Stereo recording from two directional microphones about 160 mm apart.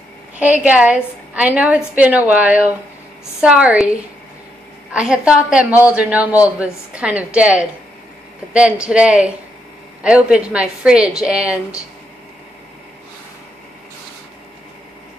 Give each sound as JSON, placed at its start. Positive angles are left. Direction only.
{"t": 0.4, "sound": "a woman's voice", "side_deg": -10}
{"t": 4.9, "sound": "a woman's voice", "side_deg": -5}